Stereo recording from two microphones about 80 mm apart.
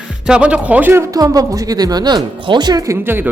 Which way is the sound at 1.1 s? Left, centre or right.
Right.